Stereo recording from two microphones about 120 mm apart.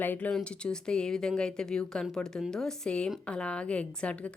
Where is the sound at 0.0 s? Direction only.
15° left (ahead or behind).